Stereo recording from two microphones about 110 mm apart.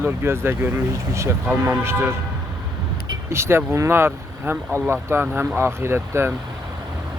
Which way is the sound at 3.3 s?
25° right (ahead or behind).